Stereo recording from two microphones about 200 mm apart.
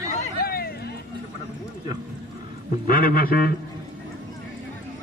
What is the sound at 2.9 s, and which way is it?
Speech, 45° left (ahead or behind).